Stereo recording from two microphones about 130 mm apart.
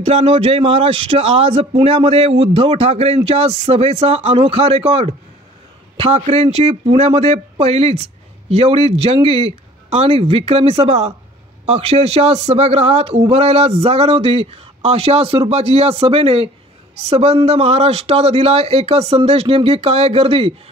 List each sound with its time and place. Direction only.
0.0 s a man's voice: 50° right (ahead or behind)